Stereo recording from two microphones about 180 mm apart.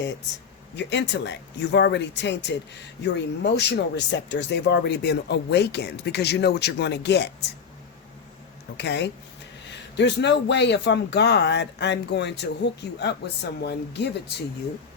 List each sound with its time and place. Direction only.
0.8 s speech: 75° left (ahead or behind)
8.8 s speech: 75° left (ahead or behind)